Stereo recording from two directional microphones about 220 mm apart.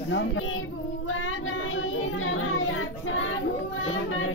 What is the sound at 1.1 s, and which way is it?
Child singing, 60° left (ahead or behind).